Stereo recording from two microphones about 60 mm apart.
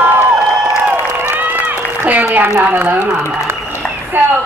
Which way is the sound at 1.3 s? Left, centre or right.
Right.